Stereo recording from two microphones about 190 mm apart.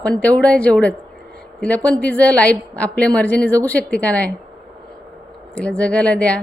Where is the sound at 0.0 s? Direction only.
5° left (ahead or behind).